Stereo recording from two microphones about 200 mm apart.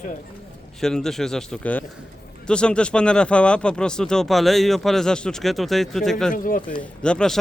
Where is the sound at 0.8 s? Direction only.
Centre (ahead or behind).